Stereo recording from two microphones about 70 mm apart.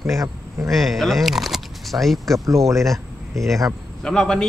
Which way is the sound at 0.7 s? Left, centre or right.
Centre.